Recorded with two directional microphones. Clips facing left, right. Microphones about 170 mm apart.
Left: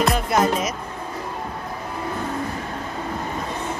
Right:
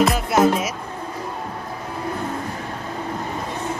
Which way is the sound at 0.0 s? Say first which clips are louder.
Right 3 dB; 5° right (ahead or behind).